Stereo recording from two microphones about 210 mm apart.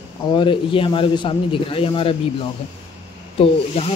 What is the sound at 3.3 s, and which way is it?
Speech, 30° left (ahead or behind).